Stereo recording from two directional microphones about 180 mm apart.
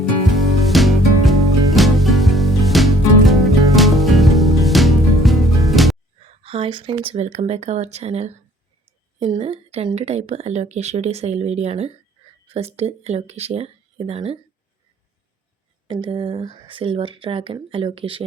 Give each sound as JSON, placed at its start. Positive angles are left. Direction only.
{"t": 0.3, "sound": "music", "side_deg": 0}
{"t": 6.4, "sound": "speech", "side_deg": -30}
{"t": 15.9, "sound": "speech", "side_deg": -30}